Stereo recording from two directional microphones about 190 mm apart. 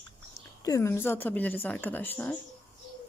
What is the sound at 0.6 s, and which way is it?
Speech, 15° left (ahead or behind).